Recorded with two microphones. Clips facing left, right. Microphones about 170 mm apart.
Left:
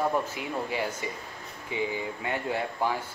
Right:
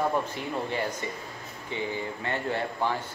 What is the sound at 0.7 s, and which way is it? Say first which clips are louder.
Speech: right 1 dB; 10° left (ahead or behind).